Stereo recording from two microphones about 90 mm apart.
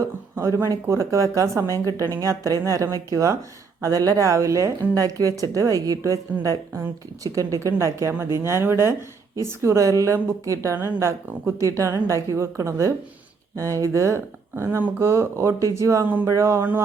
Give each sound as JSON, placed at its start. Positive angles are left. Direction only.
{"t": 0.0, "sound": "speech", "side_deg": -35}